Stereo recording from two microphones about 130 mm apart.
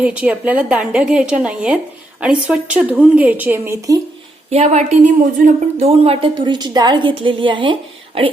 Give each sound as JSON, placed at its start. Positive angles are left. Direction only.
{"t": 0.0, "sound": "a woman's voice", "side_deg": -10}
{"t": 3.8, "sound": "speech", "side_deg": -25}
{"t": 4.5, "sound": "speech", "side_deg": -60}